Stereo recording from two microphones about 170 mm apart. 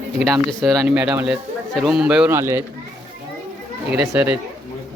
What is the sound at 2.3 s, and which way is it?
Speech, 15° right (ahead or behind).